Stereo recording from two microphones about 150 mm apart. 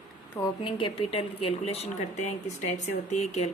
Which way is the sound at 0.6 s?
35° left (ahead or behind).